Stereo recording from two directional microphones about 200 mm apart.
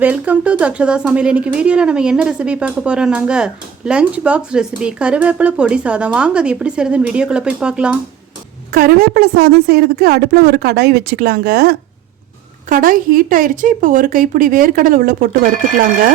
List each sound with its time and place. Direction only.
0.0 s speech: 5° right (ahead or behind)
8.7 s a woman's voice: 50° right (ahead or behind)